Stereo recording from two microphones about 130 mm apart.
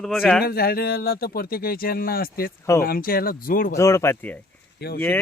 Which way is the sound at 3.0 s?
90° left.